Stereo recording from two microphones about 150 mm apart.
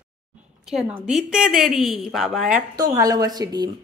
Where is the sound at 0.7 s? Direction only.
Centre (ahead or behind).